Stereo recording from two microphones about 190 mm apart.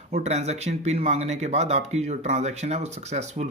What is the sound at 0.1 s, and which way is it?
Speech, 35° right (ahead or behind).